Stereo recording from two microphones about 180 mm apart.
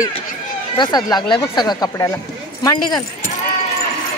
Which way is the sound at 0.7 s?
25° left (ahead or behind).